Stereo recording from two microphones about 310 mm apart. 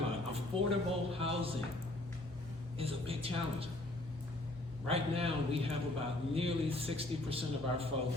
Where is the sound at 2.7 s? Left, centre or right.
Centre.